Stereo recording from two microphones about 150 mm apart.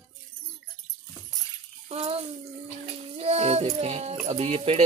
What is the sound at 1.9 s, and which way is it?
Bathtub, 45° right (ahead or behind).